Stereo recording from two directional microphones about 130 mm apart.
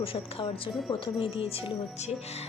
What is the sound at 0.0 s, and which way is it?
Speech, 45° left (ahead or behind).